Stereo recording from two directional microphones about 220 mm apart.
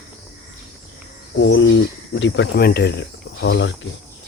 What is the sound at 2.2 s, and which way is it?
Speech, 50° left (ahead or behind).